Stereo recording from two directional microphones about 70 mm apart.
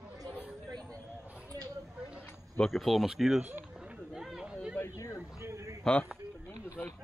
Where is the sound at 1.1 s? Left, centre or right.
Right.